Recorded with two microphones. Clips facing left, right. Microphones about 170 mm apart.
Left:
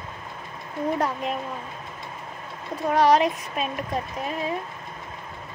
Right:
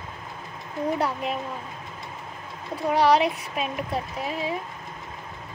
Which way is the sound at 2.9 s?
10° right (ahead or behind).